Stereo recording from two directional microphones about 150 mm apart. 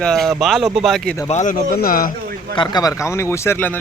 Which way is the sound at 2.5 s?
25° left (ahead or behind).